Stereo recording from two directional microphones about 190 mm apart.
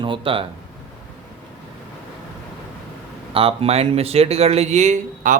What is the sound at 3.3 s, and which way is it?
Speech, 30° right (ahead or behind).